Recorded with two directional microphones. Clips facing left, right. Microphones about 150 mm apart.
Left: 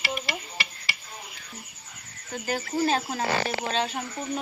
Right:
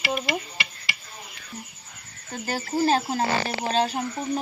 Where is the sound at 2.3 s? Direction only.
35° right (ahead or behind).